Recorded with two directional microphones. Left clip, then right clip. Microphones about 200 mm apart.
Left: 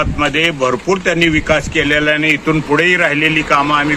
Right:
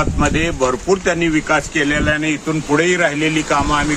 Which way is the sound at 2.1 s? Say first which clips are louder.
Left 5 dB; 15° left (ahead or behind).